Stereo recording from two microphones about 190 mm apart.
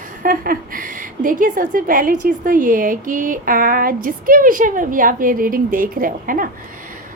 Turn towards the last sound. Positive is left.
turn(degrees=-45)  # may be behind; listen again after turning